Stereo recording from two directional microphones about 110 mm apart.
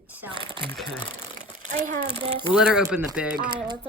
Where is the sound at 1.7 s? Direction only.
75° right (ahead or behind).